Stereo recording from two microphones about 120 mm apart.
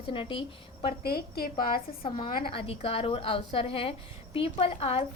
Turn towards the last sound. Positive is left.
turn(degrees=55)  # may be behind; listen again after turning